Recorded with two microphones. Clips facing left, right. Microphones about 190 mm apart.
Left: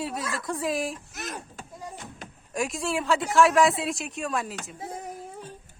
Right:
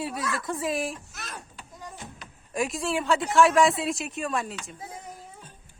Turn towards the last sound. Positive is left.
turn(degrees=0)  # may be behind; listen again after turning